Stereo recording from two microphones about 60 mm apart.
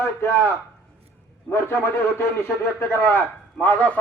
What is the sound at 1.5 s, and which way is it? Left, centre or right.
A man's voice, left.